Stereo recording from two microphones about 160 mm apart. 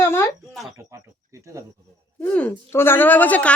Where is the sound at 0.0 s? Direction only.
15° left (ahead or behind).